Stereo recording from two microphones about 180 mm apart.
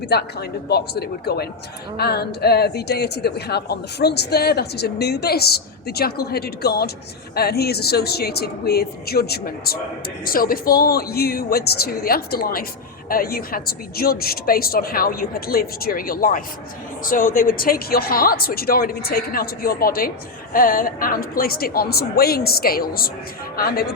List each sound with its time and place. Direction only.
0.1 s speech: 65° left (ahead or behind)